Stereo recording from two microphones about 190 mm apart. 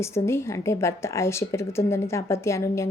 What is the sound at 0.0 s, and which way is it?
Speech, 15° left (ahead or behind).